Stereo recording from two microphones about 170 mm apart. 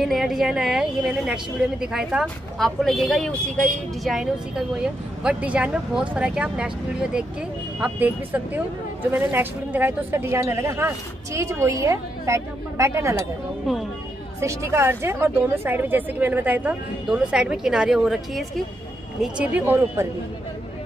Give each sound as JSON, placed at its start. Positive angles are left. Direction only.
{"t": 0.0, "sound": "a woman's voice", "side_deg": 0}
{"t": 13.7, "sound": "a woman's voice", "side_deg": 0}
{"t": 14.4, "sound": "a woman's voice", "side_deg": -15}